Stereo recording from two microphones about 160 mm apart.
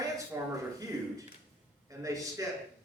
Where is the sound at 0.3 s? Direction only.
20° right (ahead or behind).